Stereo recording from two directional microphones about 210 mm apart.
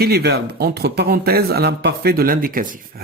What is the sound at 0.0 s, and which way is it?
A man's voice, 50° right (ahead or behind).